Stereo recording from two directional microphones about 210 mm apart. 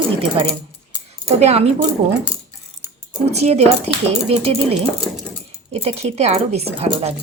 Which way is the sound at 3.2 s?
30° right (ahead or behind).